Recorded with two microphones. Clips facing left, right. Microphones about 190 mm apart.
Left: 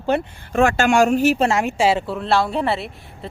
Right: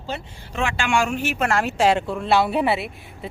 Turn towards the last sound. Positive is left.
turn(degrees=-5)  # may be behind; listen again after turning